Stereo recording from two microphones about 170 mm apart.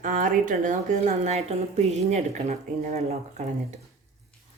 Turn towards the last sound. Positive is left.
turn(degrees=-45)  # may be behind; listen again after turning